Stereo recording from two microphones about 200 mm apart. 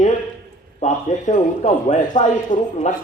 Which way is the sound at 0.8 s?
35° left (ahead or behind).